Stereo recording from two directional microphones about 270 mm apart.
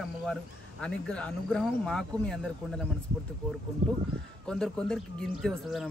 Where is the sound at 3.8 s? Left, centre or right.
Right.